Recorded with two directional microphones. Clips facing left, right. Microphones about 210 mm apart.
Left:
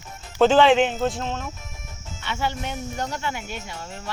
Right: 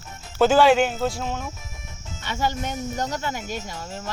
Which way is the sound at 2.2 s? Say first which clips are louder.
Right 2 dB; 40° right (ahead or behind).